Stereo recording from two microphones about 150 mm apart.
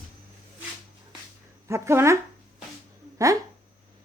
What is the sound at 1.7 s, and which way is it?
Speech, 20° right (ahead or behind).